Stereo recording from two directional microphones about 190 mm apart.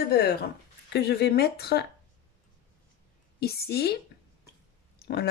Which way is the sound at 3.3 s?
55° left (ahead or behind).